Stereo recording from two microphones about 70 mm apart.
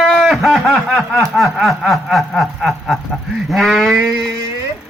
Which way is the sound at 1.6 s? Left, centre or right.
Centre.